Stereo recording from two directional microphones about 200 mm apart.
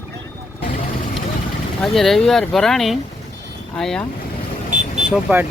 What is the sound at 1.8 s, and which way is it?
Speech, centre (ahead or behind).